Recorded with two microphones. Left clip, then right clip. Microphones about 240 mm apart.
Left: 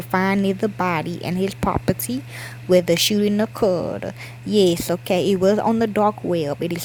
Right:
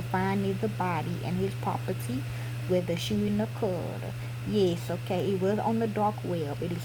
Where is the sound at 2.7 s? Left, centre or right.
Left.